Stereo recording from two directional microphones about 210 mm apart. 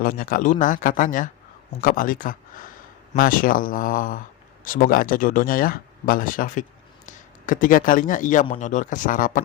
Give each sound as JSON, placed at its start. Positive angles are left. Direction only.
{"t": 0.0, "sound": "speech", "side_deg": 40}